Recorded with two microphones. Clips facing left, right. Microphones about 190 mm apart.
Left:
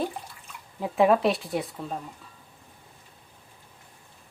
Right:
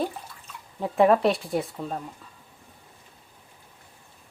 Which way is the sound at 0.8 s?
Centre (ahead or behind).